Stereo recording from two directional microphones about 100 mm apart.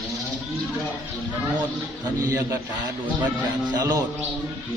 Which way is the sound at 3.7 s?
40° right (ahead or behind).